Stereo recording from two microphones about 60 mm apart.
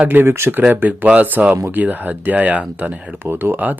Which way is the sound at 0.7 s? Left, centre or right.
Right.